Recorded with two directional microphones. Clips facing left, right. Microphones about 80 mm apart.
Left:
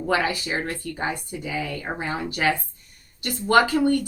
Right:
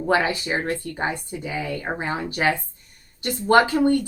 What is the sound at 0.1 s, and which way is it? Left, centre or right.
Speech, right.